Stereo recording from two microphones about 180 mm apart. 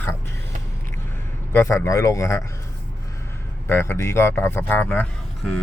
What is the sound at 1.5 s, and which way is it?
Speech, 15° left (ahead or behind).